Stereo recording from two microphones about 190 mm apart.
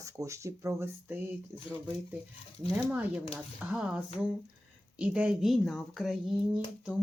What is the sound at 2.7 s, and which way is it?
Speech, 5° right (ahead or behind).